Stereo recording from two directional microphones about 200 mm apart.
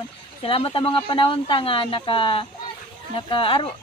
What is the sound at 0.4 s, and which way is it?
Speech, 30° left (ahead or behind).